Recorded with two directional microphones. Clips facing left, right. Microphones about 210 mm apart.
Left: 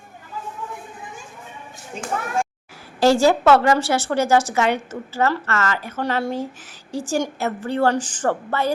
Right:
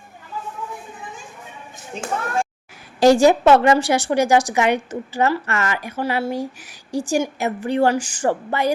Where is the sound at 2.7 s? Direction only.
15° right (ahead or behind).